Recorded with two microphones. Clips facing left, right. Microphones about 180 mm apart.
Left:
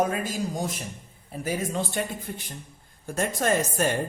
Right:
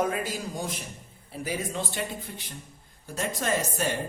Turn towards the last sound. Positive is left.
turn(degrees=50)  # may be behind; listen again after turning